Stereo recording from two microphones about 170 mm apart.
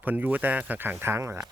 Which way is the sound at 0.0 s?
10° right (ahead or behind).